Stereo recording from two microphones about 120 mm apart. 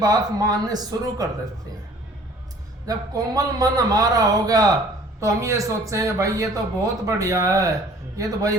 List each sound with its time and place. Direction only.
0.0 s a man's voice: 30° right (ahead or behind)
2.9 s a man's voice: 30° right (ahead or behind)